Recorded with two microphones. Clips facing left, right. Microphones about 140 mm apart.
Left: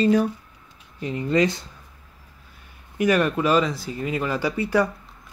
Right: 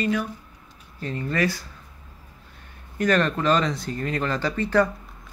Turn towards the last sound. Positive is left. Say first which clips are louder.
# even
turn(degrees=10)  # may be behind; listen again after turning